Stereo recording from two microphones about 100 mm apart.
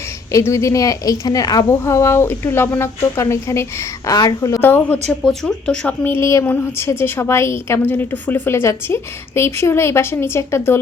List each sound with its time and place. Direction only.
0.3 s a woman's voice: 30° left (ahead or behind)
4.6 s a woman's voice: 20° left (ahead or behind)
5.2 s speech: 5° left (ahead or behind)
6.1 s a woman's voice: 25° left (ahead or behind)